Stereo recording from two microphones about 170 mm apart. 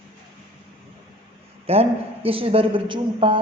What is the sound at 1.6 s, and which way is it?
A woman's voice, 35° right (ahead or behind).